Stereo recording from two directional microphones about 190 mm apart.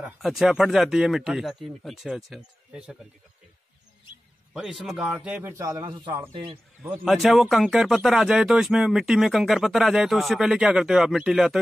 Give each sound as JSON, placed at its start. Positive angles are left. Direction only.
{"t": 0.0, "sound": "speech", "side_deg": 0}
{"t": 4.6, "sound": "a man's voice", "side_deg": 0}
{"t": 7.1, "sound": "speech", "side_deg": 0}